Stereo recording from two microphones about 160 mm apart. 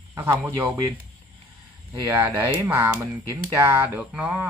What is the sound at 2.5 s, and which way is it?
Speech, 15° right (ahead or behind).